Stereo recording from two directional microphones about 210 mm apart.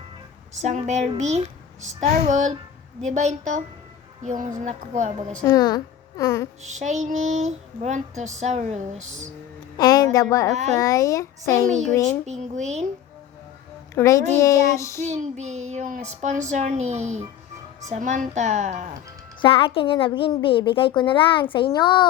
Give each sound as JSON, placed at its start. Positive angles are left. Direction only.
{"t": 0.6, "sound": "speech", "side_deg": -35}
{"t": 5.5, "sound": "a woman's voice", "side_deg": 20}
{"t": 6.6, "sound": "speech", "side_deg": -35}
{"t": 9.7, "sound": "a sound", "side_deg": 20}
{"t": 10.8, "sound": "speech", "side_deg": 15}
{"t": 11.7, "sound": "speech", "side_deg": -35}
{"t": 13.9, "sound": "speech", "side_deg": 15}
{"t": 15.0, "sound": "speech", "side_deg": -30}
{"t": 19.4, "sound": "a woman's voice", "side_deg": 25}